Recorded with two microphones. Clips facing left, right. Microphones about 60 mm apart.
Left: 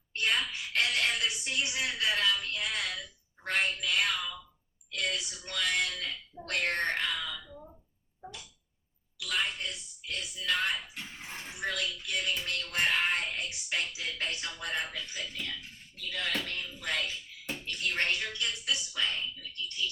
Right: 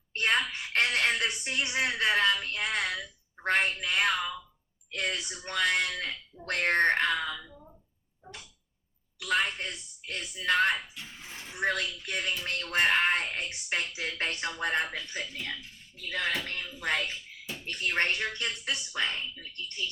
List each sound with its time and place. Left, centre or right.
0.1 s a woman's voice: right
9.1 s speech: right